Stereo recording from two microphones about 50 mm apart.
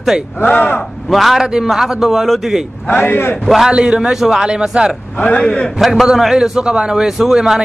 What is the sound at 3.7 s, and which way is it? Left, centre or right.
Speech, centre.